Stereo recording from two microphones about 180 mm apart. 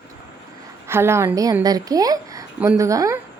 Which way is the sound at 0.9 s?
15° right (ahead or behind).